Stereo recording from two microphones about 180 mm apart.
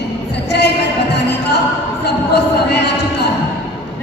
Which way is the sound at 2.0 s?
70° left (ahead or behind).